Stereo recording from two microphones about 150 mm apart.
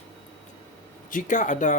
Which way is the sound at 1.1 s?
55° left (ahead or behind).